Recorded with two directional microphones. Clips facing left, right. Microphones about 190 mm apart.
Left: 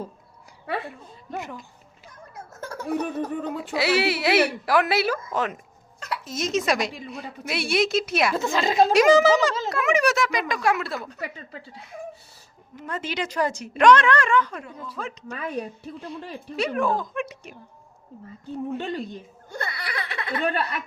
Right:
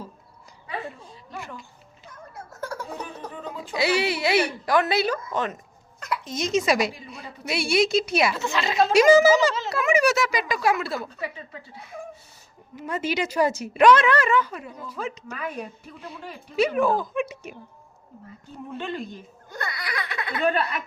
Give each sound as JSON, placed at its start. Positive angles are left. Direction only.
{"t": 1.3, "sound": "speech", "side_deg": 20}
{"t": 2.8, "sound": "speech", "side_deg": 65}
{"t": 3.8, "sound": "speech", "side_deg": 5}
{"t": 8.5, "sound": "a woman's voice", "side_deg": 40}
{"t": 8.9, "sound": "speech", "side_deg": 0}
{"t": 12.7, "sound": "a woman's voice", "side_deg": -10}
{"t": 15.3, "sound": "a woman's voice", "side_deg": 35}
{"t": 16.6, "sound": "speech", "side_deg": 0}
{"t": 18.7, "sound": "a woman's voice", "side_deg": 40}
{"t": 19.5, "sound": "speech", "side_deg": 25}